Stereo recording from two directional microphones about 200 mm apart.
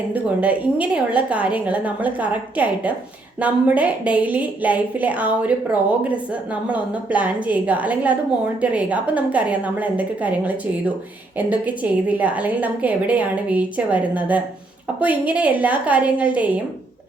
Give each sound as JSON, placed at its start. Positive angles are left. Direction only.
{"t": 0.1, "sound": "a woman's voice", "side_deg": -5}